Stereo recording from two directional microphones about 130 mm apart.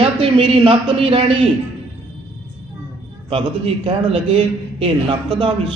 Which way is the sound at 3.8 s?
45° right (ahead or behind).